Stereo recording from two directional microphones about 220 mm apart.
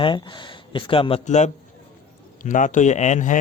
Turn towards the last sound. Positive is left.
turn(degrees=35)  # may be behind; listen again after turning